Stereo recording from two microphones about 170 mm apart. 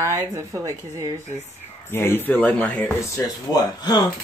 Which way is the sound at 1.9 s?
15° left (ahead or behind).